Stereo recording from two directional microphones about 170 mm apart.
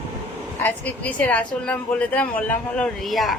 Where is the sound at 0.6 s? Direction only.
10° left (ahead or behind).